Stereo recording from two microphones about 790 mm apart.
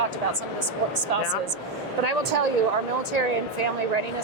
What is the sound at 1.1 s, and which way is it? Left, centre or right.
Speech, right.